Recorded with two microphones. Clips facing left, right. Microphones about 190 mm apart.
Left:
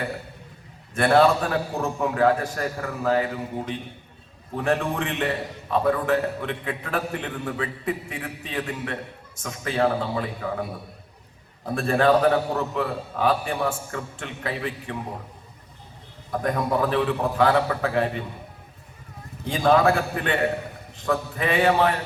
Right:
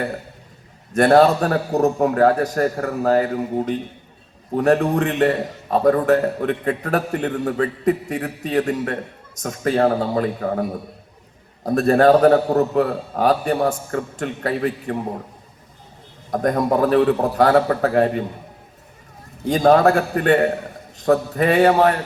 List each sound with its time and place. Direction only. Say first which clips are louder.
0.9 s a man's voice: right 5 dB; 40° right (ahead or behind)
16.3 s a man's voice: right 6 dB; 40° right (ahead or behind)
19.5 s a man's voice: right 5 dB; 40° right (ahead or behind)